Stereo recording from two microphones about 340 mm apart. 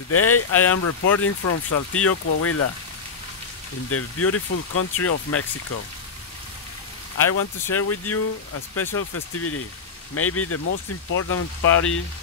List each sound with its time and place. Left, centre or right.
0.1 s speech: left
3.9 s speech: left
7.2 s speech: left